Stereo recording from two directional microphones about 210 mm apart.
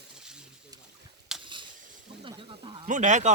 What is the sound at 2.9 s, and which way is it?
Speech, 35° right (ahead or behind).